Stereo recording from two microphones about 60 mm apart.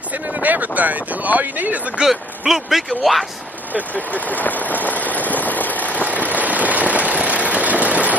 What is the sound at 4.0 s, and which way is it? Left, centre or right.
Speech, left.